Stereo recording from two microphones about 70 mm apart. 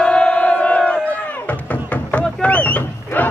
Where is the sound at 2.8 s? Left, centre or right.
Left.